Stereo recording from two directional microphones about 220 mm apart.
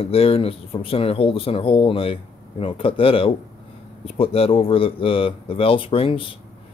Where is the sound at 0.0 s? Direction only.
25° left (ahead or behind).